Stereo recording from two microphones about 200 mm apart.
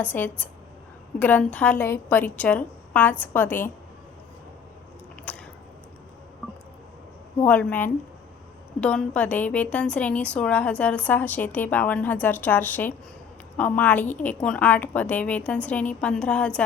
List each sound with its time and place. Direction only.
0.0 s a woman's voice: 10° left (ahead or behind)
5.3 s biting: 10° left (ahead or behind)
7.4 s a woman's voice: 5° left (ahead or behind)